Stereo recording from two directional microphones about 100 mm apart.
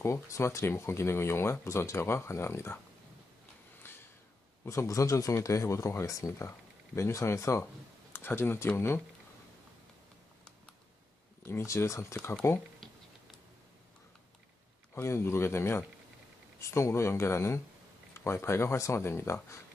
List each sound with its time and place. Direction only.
0.0 s speech: 30° left (ahead or behind)
3.8 s snort: 20° left (ahead or behind)
4.6 s speech: 35° left (ahead or behind)
11.4 s speech: 25° left (ahead or behind)
12.8 s a sound: 5° left (ahead or behind)
15.0 s speech: 25° left (ahead or behind)